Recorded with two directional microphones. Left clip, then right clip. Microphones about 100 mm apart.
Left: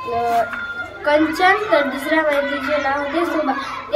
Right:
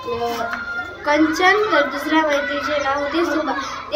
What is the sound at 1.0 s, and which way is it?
A child's voice, 25° left (ahead or behind).